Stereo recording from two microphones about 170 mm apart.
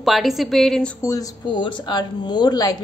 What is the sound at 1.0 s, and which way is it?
Speech, 20° left (ahead or behind).